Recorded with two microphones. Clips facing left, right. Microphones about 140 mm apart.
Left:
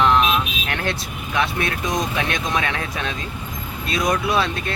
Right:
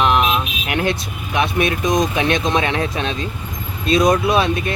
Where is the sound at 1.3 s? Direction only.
15° right (ahead or behind).